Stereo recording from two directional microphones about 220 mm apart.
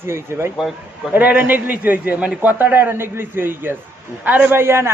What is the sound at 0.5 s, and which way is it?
A man's voice, centre (ahead or behind).